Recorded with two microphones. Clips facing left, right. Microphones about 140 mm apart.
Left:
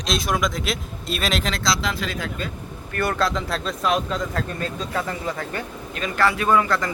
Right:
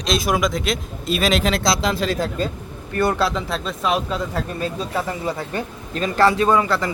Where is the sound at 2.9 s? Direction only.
20° right (ahead or behind).